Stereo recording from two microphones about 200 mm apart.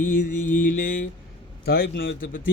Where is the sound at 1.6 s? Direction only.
50° left (ahead or behind).